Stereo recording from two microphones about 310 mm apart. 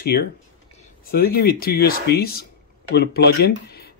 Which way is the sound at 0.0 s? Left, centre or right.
Left.